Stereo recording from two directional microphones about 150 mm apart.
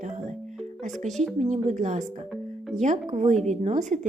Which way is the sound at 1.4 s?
50° right (ahead or behind).